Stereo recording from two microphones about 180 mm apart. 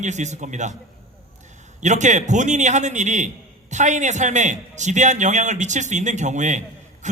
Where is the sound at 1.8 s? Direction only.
40° right (ahead or behind).